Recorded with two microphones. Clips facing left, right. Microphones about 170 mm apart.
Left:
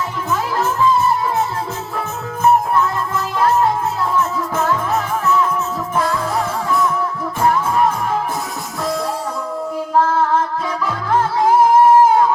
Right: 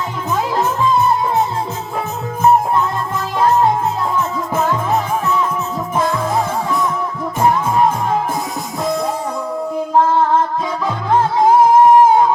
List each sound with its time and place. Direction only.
0.5 s music: 20° right (ahead or behind)
3.3 s music: 20° right (ahead or behind)
11.8 s a sound: 20° right (ahead or behind)